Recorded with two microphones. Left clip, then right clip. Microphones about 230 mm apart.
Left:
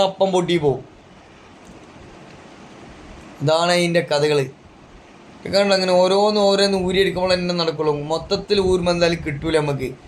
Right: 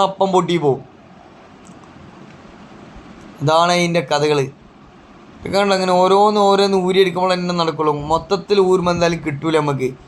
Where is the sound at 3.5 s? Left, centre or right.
Centre.